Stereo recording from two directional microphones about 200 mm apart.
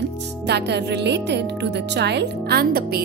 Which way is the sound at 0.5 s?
55° right (ahead or behind).